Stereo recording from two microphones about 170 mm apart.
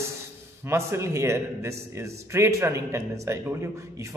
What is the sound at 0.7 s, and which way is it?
A man's voice, 15° right (ahead or behind).